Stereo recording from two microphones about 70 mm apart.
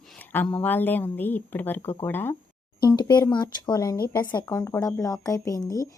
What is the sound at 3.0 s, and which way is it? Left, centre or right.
Speech, left.